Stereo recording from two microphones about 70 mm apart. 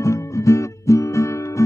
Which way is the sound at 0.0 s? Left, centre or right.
Left.